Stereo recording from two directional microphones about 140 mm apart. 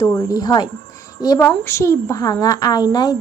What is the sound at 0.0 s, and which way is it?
A woman's voice, 25° left (ahead or behind).